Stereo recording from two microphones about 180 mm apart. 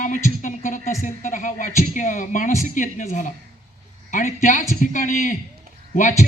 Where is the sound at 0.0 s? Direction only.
45° left (ahead or behind).